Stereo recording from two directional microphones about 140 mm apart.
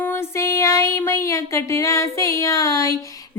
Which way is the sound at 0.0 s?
15° left (ahead or behind).